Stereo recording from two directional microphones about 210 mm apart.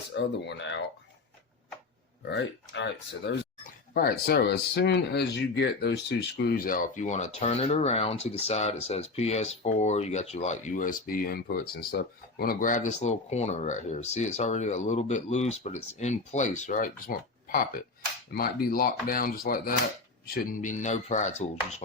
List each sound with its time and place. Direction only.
0.1 s speech: 60° left (ahead or behind)
2.3 s speech: 55° left (ahead or behind); by 21.8 s 35° left (ahead or behind)